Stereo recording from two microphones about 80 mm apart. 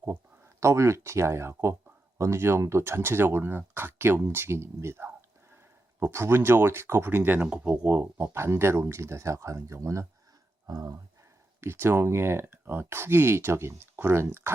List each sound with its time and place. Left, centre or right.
0.6 s speech: right
11.6 s speech: right